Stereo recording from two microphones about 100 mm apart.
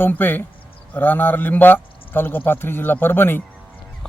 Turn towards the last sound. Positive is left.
turn(degrees=20)  # may be behind; listen again after turning